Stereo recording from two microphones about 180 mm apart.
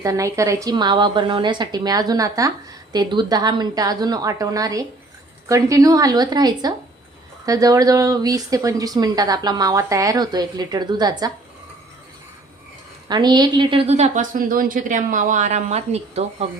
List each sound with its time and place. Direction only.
0.0 s speech: 20° right (ahead or behind)
13.1 s a woman's voice: 25° right (ahead or behind)